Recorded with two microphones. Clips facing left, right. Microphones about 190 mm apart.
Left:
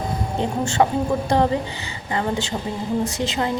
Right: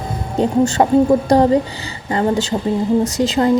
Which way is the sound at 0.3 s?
40° right (ahead or behind).